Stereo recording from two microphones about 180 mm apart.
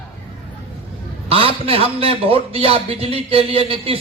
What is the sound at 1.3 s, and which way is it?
A man's voice, 30° right (ahead or behind).